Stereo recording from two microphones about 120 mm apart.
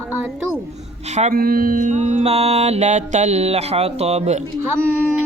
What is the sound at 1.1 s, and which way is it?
Music, 80° right.